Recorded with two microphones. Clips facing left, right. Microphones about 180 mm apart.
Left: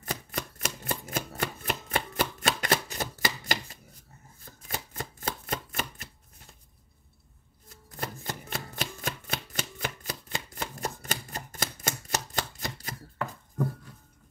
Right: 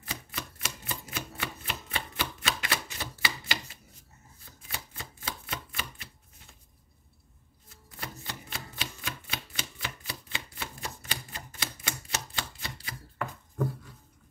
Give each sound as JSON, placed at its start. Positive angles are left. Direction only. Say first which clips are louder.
{"t": 0.0, "sound": "chopping", "louder": "left 5 dB", "side_deg": 45}
{"t": 4.6, "sound": "a sound", "louder": "left 6 dB", "side_deg": 45}
{"t": 7.9, "sound": "chopping", "louder": "left 5 dB", "side_deg": 45}